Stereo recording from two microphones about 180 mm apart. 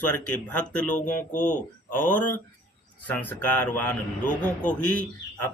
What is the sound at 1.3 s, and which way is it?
Speech, 45° left (ahead or behind).